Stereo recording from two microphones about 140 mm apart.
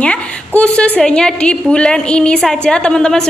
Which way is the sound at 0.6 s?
10° left (ahead or behind).